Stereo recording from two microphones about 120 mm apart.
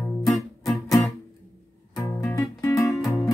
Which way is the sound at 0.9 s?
25° left (ahead or behind).